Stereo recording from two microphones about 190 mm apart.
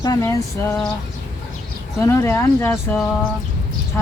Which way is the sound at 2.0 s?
15° left (ahead or behind).